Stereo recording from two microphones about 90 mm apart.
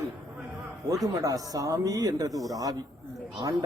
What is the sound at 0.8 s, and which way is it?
Speech, 40° right (ahead or behind).